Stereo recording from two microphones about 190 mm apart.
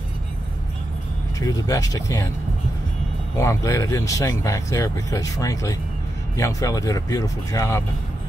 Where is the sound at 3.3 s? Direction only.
15° left (ahead or behind).